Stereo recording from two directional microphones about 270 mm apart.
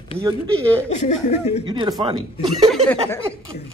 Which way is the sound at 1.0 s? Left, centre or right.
Left.